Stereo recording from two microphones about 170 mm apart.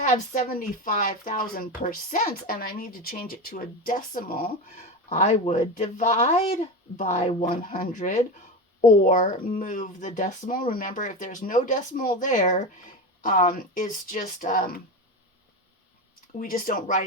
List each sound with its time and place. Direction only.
0.0 s speech: 50° left (ahead or behind)
5.0 s speech: 40° left (ahead or behind)
16.4 s speech: 55° left (ahead or behind)